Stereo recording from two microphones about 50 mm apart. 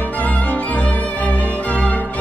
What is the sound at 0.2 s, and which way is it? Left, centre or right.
Music, left.